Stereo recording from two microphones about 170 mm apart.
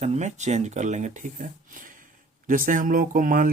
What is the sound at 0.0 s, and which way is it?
Speech, 45° right (ahead or behind).